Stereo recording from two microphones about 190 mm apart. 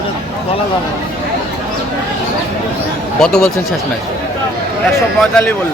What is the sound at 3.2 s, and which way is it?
Speech, 5° left (ahead or behind).